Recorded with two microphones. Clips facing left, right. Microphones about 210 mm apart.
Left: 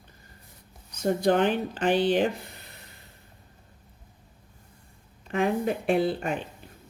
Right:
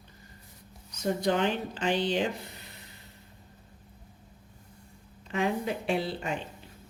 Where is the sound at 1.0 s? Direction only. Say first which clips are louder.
Left 4 dB; 55° left (ahead or behind).